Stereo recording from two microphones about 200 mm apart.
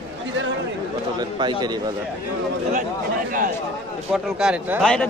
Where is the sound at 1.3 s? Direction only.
20° right (ahead or behind).